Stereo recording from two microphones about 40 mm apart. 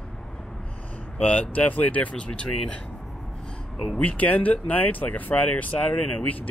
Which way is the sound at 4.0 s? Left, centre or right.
Left.